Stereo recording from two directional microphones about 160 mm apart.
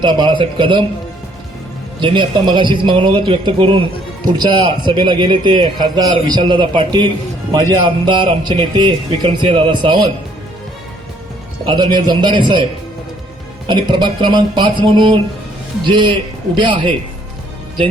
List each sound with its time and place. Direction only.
0.0 s a man's voice: 30° right (ahead or behind)
2.0 s a man's voice: 30° right (ahead or behind)
11.6 s a man's voice: 30° right (ahead or behind)
13.7 s a man's voice: 30° right (ahead or behind)